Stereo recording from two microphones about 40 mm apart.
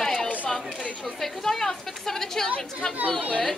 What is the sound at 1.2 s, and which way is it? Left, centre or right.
A woman's voice, centre.